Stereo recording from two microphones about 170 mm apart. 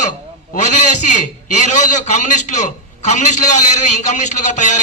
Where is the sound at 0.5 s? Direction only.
45° left (ahead or behind).